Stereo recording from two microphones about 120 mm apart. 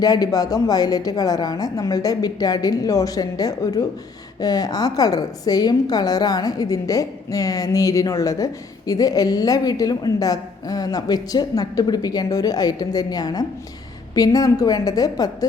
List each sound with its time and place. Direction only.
0.0 s a woman's voice: 30° left (ahead or behind)